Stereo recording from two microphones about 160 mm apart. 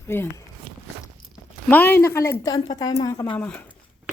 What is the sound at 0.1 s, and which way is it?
Speech, 15° left (ahead or behind).